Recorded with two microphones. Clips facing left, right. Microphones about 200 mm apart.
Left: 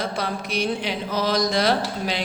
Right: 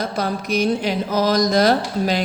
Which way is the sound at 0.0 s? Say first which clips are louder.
Right 4 dB; 45° right (ahead or behind).